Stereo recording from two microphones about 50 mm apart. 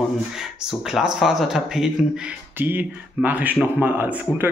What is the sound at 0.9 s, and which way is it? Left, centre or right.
Speech, centre.